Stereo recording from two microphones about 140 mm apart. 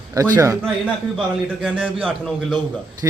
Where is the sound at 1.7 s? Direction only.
10° right (ahead or behind).